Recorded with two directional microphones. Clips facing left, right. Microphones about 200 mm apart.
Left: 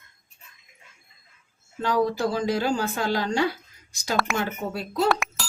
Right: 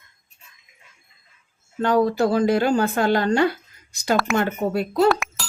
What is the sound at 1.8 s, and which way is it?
A woman's voice, 60° right (ahead or behind).